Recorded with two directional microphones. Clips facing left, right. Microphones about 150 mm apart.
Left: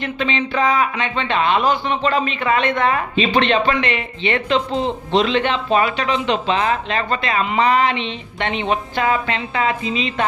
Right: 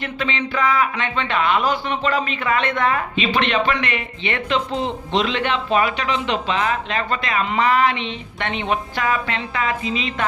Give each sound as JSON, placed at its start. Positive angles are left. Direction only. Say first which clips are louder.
{"t": 0.0, "sound": "speech", "louder": "left 3 dB", "side_deg": 25}
{"t": 3.2, "sound": "a man's voice", "louder": "left 5 dB", "side_deg": 35}